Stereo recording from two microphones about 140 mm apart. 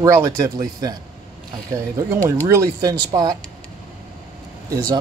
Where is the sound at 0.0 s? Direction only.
25° right (ahead or behind).